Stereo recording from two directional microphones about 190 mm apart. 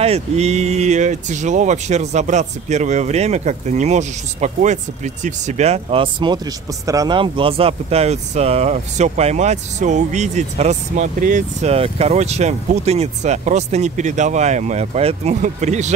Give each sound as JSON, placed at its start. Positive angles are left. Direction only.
{"t": 0.0, "sound": "speech", "side_deg": -35}